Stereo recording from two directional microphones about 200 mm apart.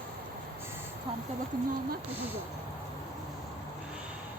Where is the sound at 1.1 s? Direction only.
25° right (ahead or behind).